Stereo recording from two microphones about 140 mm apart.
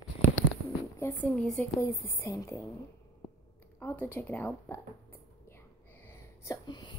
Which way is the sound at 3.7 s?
15° left (ahead or behind).